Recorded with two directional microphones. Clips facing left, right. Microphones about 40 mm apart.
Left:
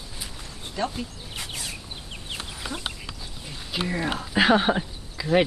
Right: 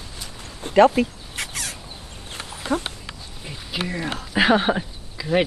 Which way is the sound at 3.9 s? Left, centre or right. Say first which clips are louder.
Left 1 dB; centre.